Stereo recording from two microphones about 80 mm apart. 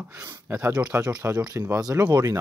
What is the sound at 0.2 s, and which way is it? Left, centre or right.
Speech, right.